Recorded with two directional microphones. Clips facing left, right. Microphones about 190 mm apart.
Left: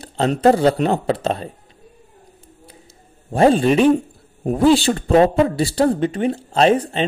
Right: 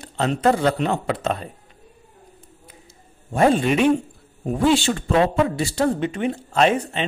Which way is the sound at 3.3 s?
30° left (ahead or behind).